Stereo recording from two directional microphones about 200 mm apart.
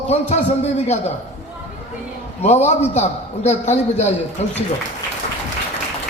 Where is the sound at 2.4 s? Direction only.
35° left (ahead or behind).